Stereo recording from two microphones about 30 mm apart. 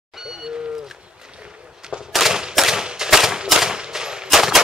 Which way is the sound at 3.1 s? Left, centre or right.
Centre.